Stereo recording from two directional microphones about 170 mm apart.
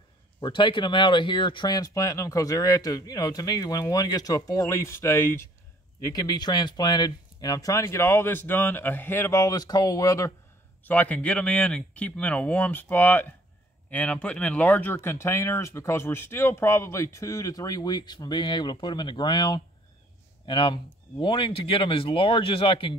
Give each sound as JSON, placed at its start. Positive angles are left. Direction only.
{"t": 0.4, "sound": "speech", "side_deg": 30}